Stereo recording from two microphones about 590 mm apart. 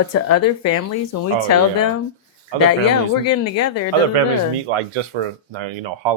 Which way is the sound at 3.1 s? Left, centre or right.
Left.